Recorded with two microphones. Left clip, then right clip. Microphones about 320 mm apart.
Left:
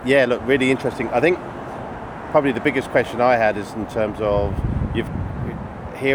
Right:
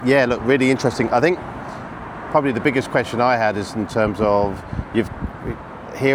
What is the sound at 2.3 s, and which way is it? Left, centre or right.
Speech, right.